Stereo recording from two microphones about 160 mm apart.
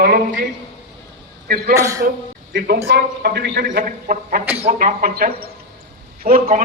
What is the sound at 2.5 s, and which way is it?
A man's voice, 70° right (ahead or behind).